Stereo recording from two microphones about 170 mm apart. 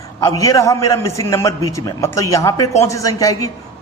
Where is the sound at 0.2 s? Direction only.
20° left (ahead or behind).